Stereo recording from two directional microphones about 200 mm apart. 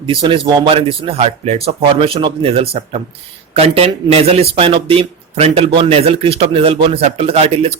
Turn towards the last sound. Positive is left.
turn(degrees=-30)  # may be behind; listen again after turning